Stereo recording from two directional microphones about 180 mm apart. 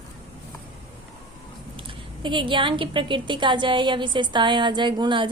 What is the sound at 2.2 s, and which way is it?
A woman's voice, 25° right (ahead or behind).